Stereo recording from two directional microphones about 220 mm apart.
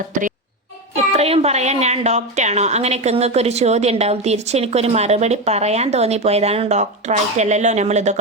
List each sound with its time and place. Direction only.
1.1 s a woman's voice: 30° right (ahead or behind)